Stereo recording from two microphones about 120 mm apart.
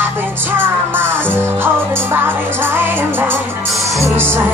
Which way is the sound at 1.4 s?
20° right (ahead or behind).